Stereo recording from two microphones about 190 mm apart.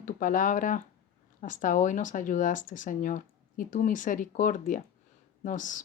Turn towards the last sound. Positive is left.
turn(degrees=40)  # may be behind; listen again after turning